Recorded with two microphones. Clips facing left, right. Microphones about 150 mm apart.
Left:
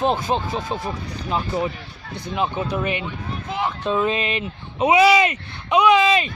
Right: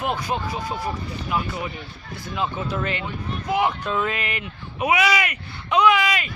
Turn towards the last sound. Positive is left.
turn(degrees=25)  # may be behind; listen again after turning